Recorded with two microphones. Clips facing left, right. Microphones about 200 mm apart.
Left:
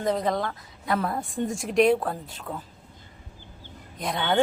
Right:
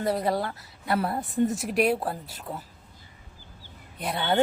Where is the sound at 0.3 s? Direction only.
35° right (ahead or behind).